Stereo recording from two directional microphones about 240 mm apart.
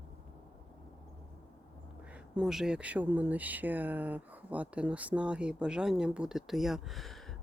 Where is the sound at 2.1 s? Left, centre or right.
Centre.